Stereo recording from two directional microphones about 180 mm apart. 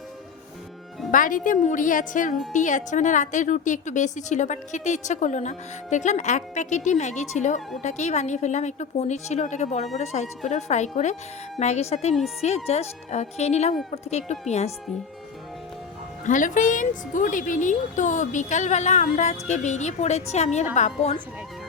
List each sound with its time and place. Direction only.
1.1 s a woman's voice: 50° left (ahead or behind)
16.2 s a woman's voice: 45° left (ahead or behind)